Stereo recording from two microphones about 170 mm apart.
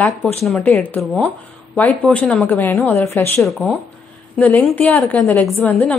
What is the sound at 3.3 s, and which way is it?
A woman's voice, centre (ahead or behind).